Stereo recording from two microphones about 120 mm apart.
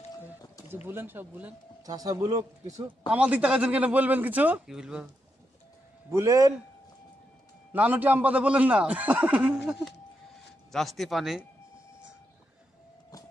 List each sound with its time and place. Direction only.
0.8 s a man's voice: 15° right (ahead or behind)
1.9 s speech: 30° right (ahead or behind)
3.1 s a man's voice: 10° right (ahead or behind)
6.1 s a man's voice: 25° right (ahead or behind)
7.7 s a man's voice: 15° right (ahead or behind)